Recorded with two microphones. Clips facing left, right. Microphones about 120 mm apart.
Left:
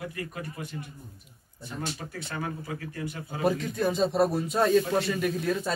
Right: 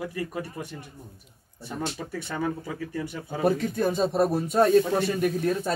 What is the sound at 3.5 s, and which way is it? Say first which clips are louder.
Speech: right 3 dB; 50° right (ahead or behind).